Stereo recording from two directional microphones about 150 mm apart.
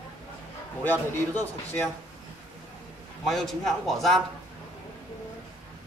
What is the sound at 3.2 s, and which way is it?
Speech, centre (ahead or behind).